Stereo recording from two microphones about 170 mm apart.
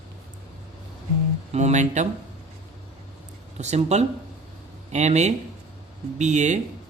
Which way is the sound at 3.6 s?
40° right (ahead or behind).